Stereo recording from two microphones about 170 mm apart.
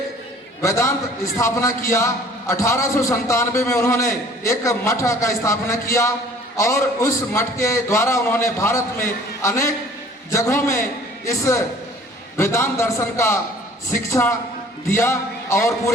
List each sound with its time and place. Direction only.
0.6 s a man's voice: 15° left (ahead or behind)